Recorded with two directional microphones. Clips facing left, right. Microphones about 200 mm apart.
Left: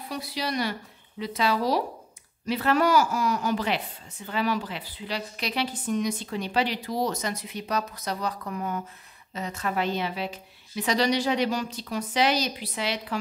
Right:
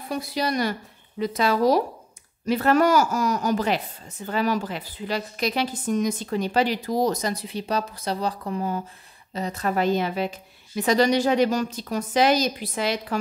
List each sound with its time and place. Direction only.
0.1 s a woman's voice: 50° right (ahead or behind)